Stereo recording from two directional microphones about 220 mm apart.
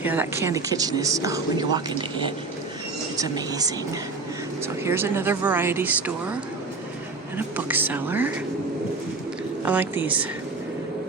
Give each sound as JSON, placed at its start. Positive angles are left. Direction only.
{"t": 0.0, "sound": "speech", "side_deg": -10}
{"t": 7.3, "sound": "speech", "side_deg": -10}
{"t": 9.6, "sound": "speech", "side_deg": -10}